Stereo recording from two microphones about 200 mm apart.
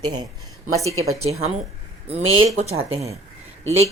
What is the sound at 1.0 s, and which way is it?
Speech, 90° right.